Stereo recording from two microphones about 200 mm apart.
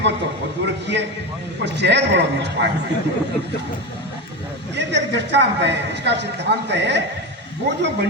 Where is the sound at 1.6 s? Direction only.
60° right (ahead or behind).